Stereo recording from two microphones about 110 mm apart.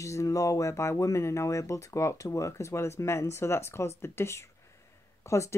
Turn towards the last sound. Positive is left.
turn(degrees=25)  # may be behind; listen again after turning